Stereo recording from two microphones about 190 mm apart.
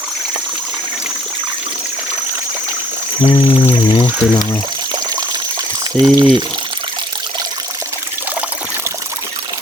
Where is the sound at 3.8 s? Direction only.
25° left (ahead or behind).